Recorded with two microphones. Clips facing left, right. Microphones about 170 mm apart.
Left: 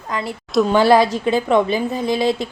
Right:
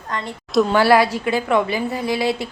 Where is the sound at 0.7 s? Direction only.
20° left (ahead or behind).